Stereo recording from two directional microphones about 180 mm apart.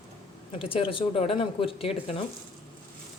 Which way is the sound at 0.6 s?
30° left (ahead or behind).